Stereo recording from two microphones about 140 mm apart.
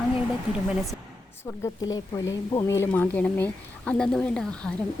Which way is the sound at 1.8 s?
25° left (ahead or behind).